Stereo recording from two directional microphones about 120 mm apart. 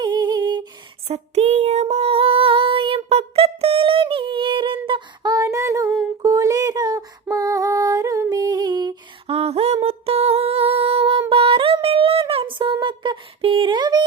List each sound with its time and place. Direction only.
0.0 s humming: 35° right (ahead or behind)
1.0 s female singing: 60° right (ahead or behind); by 9.0 s 35° right (ahead or behind)
9.2 s a sound: 55° right (ahead or behind); by 14.0 s 35° right (ahead or behind)